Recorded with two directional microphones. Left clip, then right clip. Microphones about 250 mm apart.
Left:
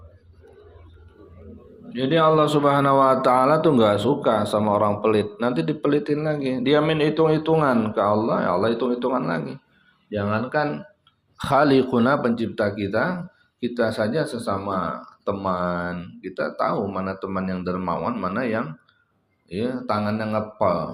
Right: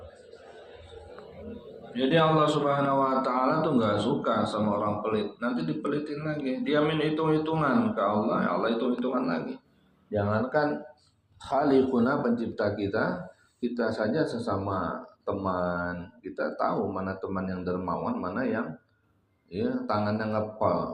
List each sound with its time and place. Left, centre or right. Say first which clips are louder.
1.9 s a man's voice: left 3 dB; centre
2.4 s a man's voice: left 6 dB; left